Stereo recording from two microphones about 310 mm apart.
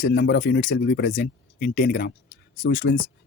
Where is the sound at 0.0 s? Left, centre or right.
Left.